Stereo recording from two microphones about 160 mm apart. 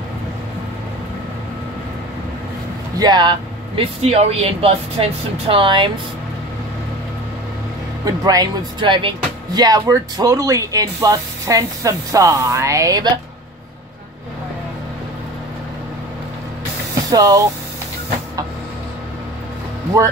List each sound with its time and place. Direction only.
3.0 s speech: 30° right (ahead or behind)
8.0 s speech: 25° right (ahead or behind)
17.1 s speech: 25° right (ahead or behind)